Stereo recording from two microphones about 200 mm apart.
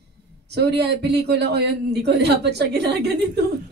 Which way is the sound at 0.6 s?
55° right (ahead or behind).